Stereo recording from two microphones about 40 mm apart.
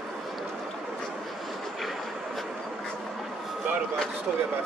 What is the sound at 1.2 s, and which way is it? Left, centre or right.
Vehicle, centre.